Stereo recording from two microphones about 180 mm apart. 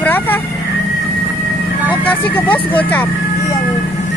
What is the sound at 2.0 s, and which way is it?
Speech, 10° left (ahead or behind).